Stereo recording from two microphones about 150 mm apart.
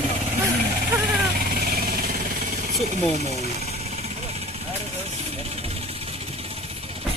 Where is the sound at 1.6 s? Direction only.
90° right.